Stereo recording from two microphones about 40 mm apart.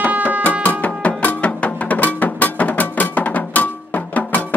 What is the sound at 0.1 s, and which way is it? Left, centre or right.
Music, right.